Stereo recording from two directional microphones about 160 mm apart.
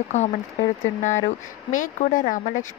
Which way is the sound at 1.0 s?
50° left (ahead or behind).